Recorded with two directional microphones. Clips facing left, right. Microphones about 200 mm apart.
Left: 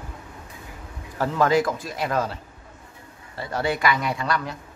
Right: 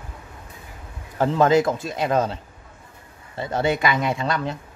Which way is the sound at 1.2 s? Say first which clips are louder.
Right 3 dB; 20° right (ahead or behind).